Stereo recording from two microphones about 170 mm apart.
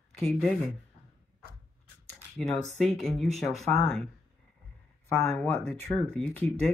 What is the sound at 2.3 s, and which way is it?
Speech, centre (ahead or behind).